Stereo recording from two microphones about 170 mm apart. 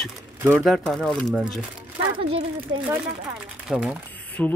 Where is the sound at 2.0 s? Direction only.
30° right (ahead or behind).